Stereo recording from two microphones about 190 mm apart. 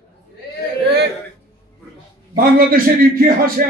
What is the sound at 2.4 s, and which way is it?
Speech, 50° right (ahead or behind).